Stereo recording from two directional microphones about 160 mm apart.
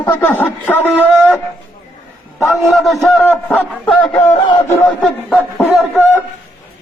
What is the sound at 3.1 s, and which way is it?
A man's voice, 10° left (ahead or behind).